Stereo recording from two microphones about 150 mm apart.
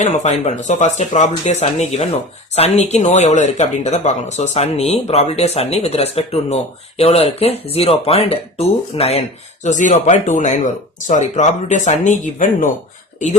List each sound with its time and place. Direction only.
0.0 s speech: 50° left (ahead or behind)
9.6 s speech: 55° left (ahead or behind)